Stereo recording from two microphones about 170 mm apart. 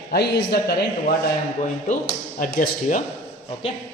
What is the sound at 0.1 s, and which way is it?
Speech, 70° left (ahead or behind).